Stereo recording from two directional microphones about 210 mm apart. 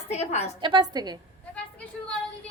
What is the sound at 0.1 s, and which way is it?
Speech, 30° left (ahead or behind).